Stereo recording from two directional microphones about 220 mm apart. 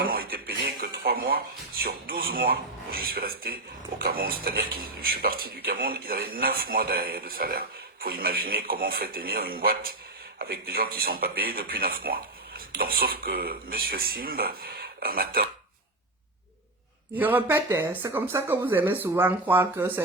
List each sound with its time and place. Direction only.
0.0 s a sound: 40° right (ahead or behind)
1.8 s speech: 45° right (ahead or behind)
17.2 s speech: 10° right (ahead or behind)